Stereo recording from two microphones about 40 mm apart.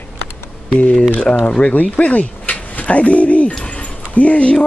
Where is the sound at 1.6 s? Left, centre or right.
Left.